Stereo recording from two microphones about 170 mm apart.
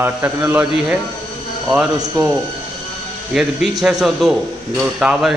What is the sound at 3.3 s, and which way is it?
A man's voice, centre (ahead or behind).